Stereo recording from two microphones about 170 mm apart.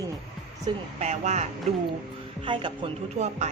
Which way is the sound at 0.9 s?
40° right (ahead or behind).